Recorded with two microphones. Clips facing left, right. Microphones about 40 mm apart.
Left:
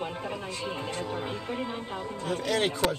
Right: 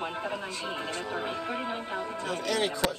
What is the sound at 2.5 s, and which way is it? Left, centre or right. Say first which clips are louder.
Speech: left 2 dB; left.